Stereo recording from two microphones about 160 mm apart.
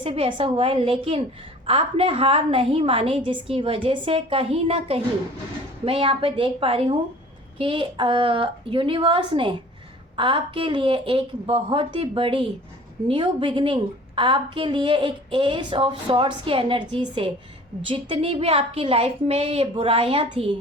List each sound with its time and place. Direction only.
0.0 s a woman's voice: 35° right (ahead or behind)